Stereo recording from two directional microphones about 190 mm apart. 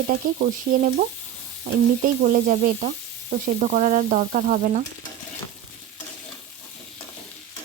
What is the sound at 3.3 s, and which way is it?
Frying, 45° right (ahead or behind).